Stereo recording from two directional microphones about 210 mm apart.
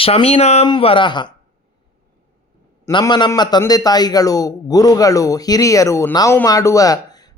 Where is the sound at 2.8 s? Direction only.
20° left (ahead or behind).